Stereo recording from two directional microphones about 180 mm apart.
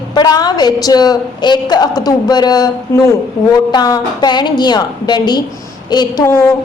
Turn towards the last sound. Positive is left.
turn(degrees=15)  # may be behind; listen again after turning